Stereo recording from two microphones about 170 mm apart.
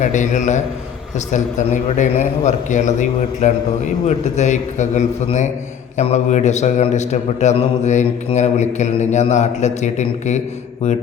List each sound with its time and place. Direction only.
0.0 s a man's voice: 45° left (ahead or behind)